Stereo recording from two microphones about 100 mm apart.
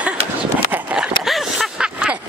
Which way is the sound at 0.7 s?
10° right (ahead or behind).